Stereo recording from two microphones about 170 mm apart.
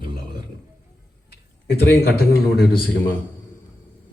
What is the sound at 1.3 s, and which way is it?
A man's voice, 75° left (ahead or behind).